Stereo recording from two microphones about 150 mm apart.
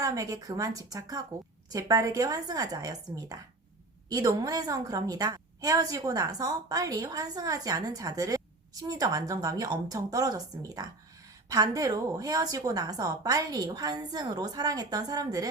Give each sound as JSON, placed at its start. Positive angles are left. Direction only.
{"t": 0.0, "sound": "a woman's voice", "side_deg": -25}